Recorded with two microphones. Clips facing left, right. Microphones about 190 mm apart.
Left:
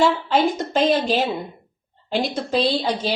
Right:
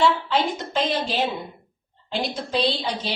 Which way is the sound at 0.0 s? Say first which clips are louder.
Left 3 dB; 45° left (ahead or behind).